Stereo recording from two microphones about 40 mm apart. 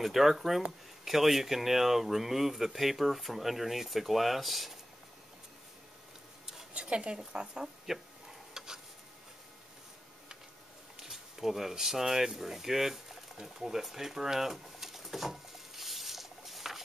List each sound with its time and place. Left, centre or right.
0.0 s speech: centre
6.7 s speech: right
7.8 s a sound: centre
11.0 s speech: centre
13.4 s pigeon: centre